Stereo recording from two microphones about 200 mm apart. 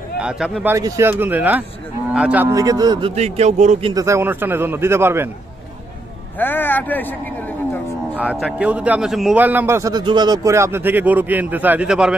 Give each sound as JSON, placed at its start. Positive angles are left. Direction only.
{"t": 0.2, "sound": "speech", "side_deg": -5}
{"t": 0.7, "sound": "a man's voice", "side_deg": -15}
{"t": 3.2, "sound": "speech", "side_deg": -35}
{"t": 3.9, "sound": "a man's voice", "side_deg": -15}
{"t": 6.3, "sound": "speech", "side_deg": 10}
{"t": 8.2, "sound": "a man's voice", "side_deg": -5}